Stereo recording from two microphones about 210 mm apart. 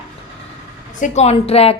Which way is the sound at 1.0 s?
30° left (ahead or behind).